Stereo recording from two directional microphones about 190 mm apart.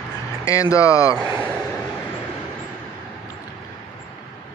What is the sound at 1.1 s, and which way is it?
Speech, 15° right (ahead or behind).